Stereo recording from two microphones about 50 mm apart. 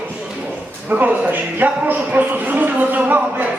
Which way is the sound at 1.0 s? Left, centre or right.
Right.